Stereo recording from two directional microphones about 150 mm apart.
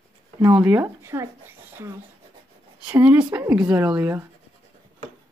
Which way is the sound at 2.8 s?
10° right (ahead or behind).